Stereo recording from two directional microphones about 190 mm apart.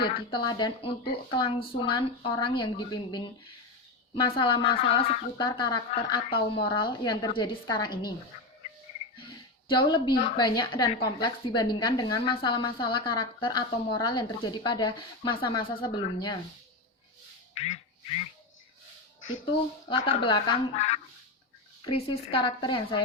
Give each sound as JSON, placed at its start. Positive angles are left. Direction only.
{"t": 0.0, "sound": "a woman's voice", "side_deg": 25}
{"t": 9.1, "sound": "a sound", "side_deg": 25}
{"t": 10.3, "sound": "a woman's voice", "side_deg": 20}
{"t": 19.9, "sound": "a woman's voice", "side_deg": 25}
{"t": 20.7, "sound": "a woman's voice", "side_deg": 35}